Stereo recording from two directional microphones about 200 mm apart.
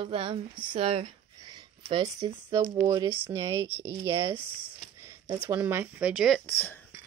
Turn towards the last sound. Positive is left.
turn(degrees=10)  # may be behind; listen again after turning